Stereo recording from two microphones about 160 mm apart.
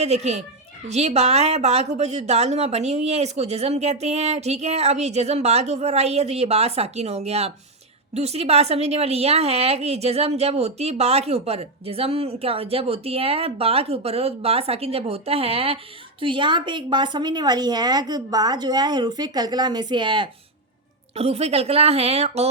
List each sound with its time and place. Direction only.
0.0 s a woman's voice: 40° right (ahead or behind)
21.2 s a woman's voice: 40° right (ahead or behind)